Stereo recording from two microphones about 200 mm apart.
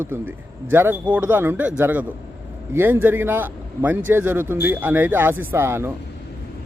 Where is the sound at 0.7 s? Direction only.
10° right (ahead or behind).